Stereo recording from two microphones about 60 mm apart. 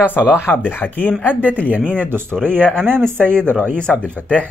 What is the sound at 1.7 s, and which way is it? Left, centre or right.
Speech, right.